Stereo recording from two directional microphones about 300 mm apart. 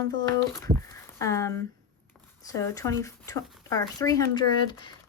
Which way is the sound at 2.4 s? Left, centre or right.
Centre.